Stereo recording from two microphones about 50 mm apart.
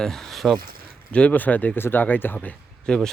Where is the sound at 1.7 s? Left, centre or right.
Left.